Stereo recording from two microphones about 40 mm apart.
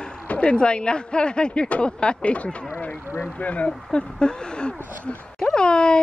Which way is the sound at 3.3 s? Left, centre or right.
Left.